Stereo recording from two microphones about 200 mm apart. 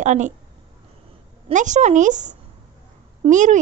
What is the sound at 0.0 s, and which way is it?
Speech, 35° right (ahead or behind).